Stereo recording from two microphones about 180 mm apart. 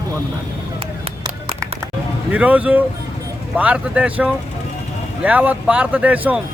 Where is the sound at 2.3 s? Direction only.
5° right (ahead or behind).